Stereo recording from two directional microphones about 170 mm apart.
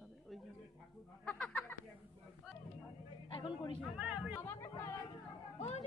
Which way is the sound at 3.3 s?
30° left (ahead or behind).